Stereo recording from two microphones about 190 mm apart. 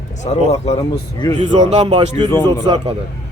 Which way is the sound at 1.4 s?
25° right (ahead or behind).